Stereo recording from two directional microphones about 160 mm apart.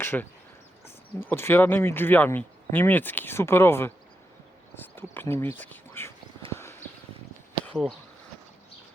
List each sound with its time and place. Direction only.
0.0 s speech: 15° left (ahead or behind)
6.5 s clip-clop: 15° left (ahead or behind)
7.7 s speech: centre (ahead or behind)